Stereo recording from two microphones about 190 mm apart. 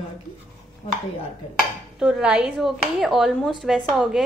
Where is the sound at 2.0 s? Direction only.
5° right (ahead or behind).